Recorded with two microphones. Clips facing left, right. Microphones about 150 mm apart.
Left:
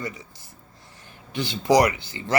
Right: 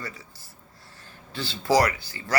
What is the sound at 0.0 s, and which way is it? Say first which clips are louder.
A man's voice: left 5 dB; 20° left (ahead or behind).